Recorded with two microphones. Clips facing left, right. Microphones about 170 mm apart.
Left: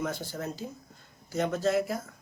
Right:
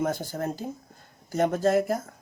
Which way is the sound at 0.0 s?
50° right (ahead or behind).